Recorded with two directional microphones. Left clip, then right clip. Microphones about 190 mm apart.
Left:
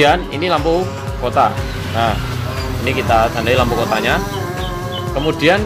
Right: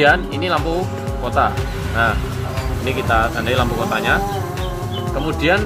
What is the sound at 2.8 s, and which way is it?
Speech, 20° left (ahead or behind).